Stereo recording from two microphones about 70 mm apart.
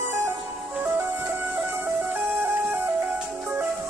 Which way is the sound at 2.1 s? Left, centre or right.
Right.